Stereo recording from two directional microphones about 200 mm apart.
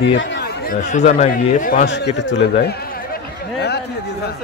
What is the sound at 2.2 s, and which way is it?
Speech, 60° left (ahead or behind).